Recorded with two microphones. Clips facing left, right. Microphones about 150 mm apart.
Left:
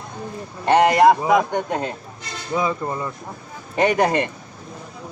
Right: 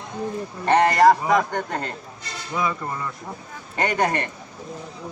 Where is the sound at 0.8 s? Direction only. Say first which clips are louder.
Left 2 dB; 5° left (ahead or behind).